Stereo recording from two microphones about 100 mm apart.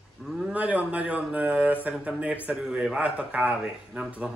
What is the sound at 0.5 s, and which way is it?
A man's voice, 15° right (ahead or behind).